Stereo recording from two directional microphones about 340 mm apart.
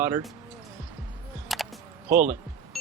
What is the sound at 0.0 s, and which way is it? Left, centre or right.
Speech, centre.